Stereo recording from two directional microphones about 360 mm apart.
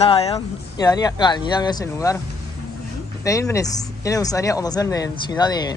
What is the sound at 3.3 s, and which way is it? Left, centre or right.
Speech, centre.